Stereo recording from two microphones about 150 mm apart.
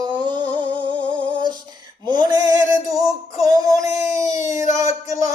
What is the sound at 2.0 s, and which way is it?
Male singing, 30° right (ahead or behind).